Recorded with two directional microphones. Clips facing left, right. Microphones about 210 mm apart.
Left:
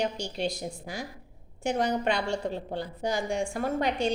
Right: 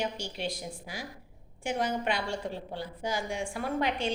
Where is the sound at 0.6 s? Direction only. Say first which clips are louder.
Left 4 dB; 45° left (ahead or behind).